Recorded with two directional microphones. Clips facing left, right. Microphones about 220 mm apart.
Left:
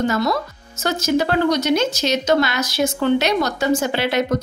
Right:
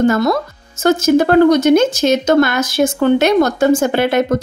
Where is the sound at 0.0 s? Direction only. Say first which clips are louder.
Right 6 dB; 50° right (ahead or behind).